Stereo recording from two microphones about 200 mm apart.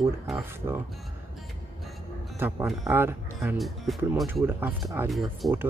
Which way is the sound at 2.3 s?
10° right (ahead or behind).